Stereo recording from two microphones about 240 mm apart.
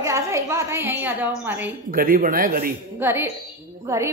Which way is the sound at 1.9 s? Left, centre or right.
Right.